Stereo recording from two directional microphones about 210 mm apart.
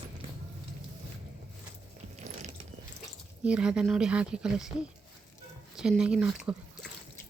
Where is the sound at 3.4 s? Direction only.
5° right (ahead or behind).